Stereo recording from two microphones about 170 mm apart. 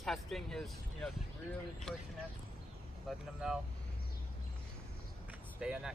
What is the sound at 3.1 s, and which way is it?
Speech, centre (ahead or behind).